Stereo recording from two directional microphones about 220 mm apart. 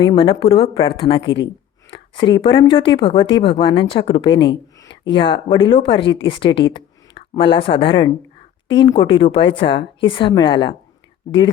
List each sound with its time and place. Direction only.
0.0 s speech: 20° left (ahead or behind)
6.7 s a sound: 25° left (ahead or behind)
7.7 s speech: 20° left (ahead or behind)